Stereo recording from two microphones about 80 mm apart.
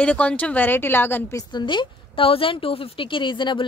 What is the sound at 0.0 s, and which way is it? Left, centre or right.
Speech, centre.